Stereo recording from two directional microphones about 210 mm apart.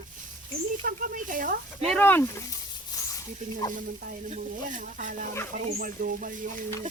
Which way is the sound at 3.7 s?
40° right (ahead or behind).